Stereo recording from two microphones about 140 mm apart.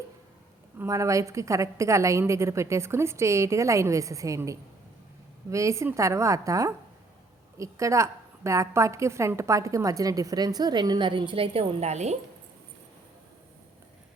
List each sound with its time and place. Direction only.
0.8 s a woman's voice: 25° right (ahead or behind); by 12.1 s 55° right (ahead or behind)